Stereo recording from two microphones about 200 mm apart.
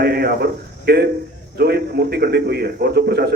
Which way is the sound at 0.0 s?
50° right (ahead or behind).